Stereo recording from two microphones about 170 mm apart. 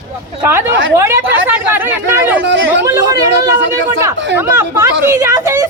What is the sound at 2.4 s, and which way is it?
Chatter, 90° right.